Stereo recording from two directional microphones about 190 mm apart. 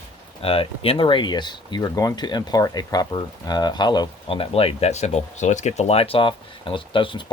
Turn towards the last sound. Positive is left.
turn(degrees=25)  # may be behind; listen again after turning